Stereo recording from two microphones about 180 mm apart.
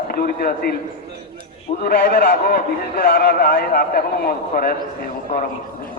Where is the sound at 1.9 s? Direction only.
55° left (ahead or behind).